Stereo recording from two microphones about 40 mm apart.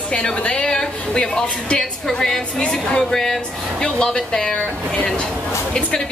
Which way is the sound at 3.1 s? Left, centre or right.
Centre.